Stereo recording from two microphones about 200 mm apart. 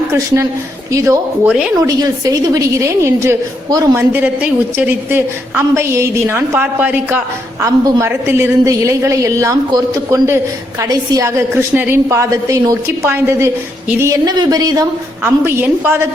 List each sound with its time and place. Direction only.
1.0 s a woman's voice: 10° right (ahead or behind)